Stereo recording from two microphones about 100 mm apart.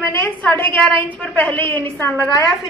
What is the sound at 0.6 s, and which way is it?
Speech, 55° right (ahead or behind).